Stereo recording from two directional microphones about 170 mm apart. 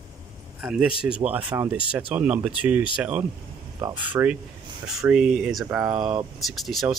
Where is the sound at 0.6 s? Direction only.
5° right (ahead or behind).